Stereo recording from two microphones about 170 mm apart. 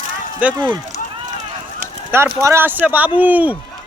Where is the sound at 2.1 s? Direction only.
15° right (ahead or behind).